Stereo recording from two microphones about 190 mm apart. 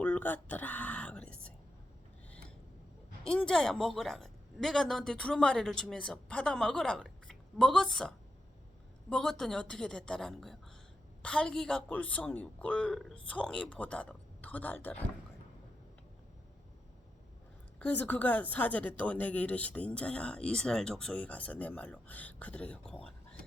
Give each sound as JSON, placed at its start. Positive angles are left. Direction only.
{"t": 0.0, "sound": "a sound", "side_deg": 10}
{"t": 3.2, "sound": "a woman's voice", "side_deg": 5}
{"t": 17.7, "sound": "a woman's voice", "side_deg": 10}